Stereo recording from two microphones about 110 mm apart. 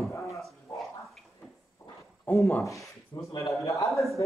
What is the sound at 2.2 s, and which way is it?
Speech, 15° left (ahead or behind).